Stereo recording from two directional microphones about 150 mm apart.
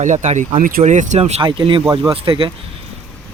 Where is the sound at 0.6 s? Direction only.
65° right (ahead or behind); by 2.5 s 35° right (ahead or behind).